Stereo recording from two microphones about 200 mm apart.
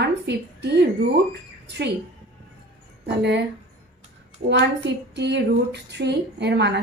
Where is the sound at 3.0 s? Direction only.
60° right (ahead or behind).